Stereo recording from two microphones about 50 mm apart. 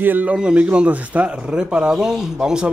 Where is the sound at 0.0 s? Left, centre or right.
Right.